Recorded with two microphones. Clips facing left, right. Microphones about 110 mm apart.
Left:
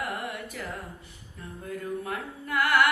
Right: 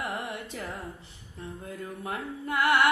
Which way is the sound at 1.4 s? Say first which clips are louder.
Left 1 dB; 25° right (ahead or behind).